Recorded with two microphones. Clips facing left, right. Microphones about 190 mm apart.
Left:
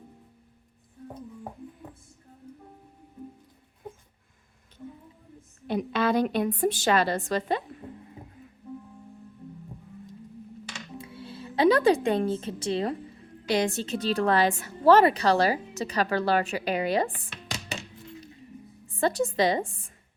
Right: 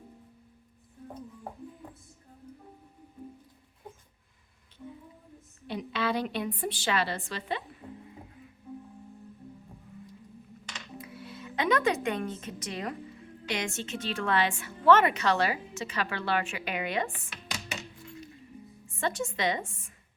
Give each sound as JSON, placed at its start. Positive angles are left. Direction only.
{"t": 5.6, "sound": "a woman's voice", "side_deg": 45}
{"t": 10.9, "sound": "music", "side_deg": 30}
{"t": 13.5, "sound": "a woman's voice", "side_deg": 35}
{"t": 18.9, "sound": "a woman's voice", "side_deg": 35}